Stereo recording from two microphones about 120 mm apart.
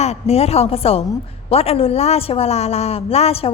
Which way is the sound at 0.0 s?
60° left (ahead or behind).